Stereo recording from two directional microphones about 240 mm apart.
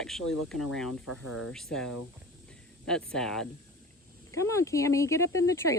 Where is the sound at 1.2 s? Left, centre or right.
Left.